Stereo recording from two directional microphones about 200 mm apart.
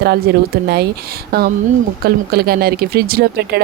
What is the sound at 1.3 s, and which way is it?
Speech, 50° right (ahead or behind).